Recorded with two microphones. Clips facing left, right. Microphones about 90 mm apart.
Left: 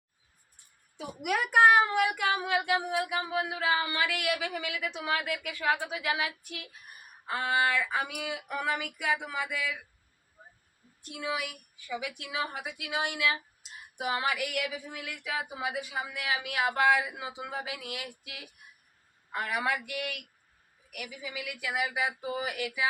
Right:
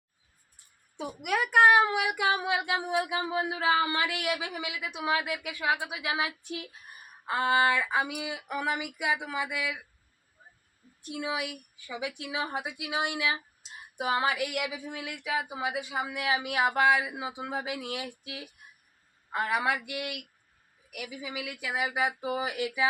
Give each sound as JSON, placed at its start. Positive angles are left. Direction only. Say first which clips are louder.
{"t": 1.2, "sound": "a woman's voice", "louder": "right 1 dB", "side_deg": 0}
{"t": 11.1, "sound": "a woman's voice", "louder": "right 1 dB", "side_deg": -20}
{"t": 19.5, "sound": "a woman's voice", "louder": "right 2 dB", "side_deg": -20}